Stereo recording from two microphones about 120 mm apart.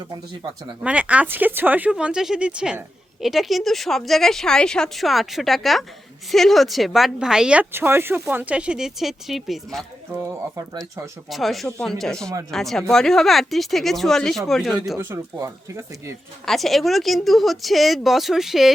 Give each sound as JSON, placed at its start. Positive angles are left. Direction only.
{"t": 0.8, "sound": "speech", "side_deg": -10}
{"t": 10.2, "sound": "speech", "side_deg": -25}
{"t": 11.3, "sound": "speech", "side_deg": 0}
{"t": 14.9, "sound": "speech", "side_deg": -20}
{"t": 16.5, "sound": "speech", "side_deg": 0}